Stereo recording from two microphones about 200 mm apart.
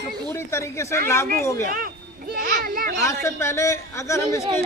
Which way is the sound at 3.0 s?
15° left (ahead or behind).